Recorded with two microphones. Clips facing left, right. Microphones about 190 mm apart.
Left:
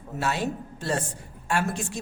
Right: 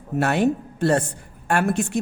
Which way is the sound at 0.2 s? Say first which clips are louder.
Right 8 dB; 60° right (ahead or behind).